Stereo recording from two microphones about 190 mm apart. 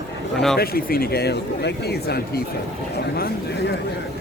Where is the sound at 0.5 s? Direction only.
50° left (ahead or behind).